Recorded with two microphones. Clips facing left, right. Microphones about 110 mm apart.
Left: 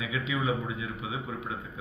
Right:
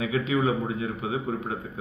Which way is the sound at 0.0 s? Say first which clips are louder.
Right 6 dB; 40° right (ahead or behind).